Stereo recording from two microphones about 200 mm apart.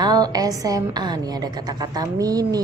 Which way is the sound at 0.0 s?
20° right (ahead or behind).